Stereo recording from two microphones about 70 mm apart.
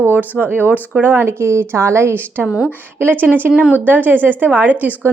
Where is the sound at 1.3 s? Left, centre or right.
Right.